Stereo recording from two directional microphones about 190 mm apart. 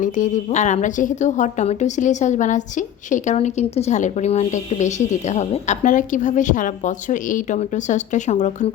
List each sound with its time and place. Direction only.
0.0 s a woman's voice: 45° left (ahead or behind)